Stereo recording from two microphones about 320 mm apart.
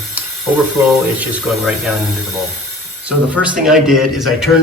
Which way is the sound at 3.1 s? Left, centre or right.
Centre.